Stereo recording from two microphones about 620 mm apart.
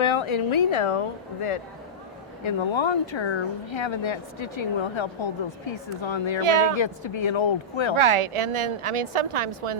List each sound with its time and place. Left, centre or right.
0.0 s speech: left
6.4 s a woman's voice: right
6.7 s speech: left
7.9 s a woman's voice: right